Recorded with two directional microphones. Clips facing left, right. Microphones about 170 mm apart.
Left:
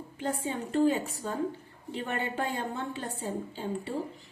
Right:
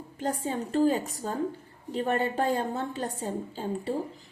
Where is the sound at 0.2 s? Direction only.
40° right (ahead or behind).